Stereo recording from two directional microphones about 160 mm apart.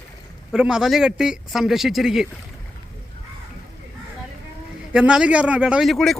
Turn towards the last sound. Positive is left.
turn(degrees=0)  # may be behind; listen again after turning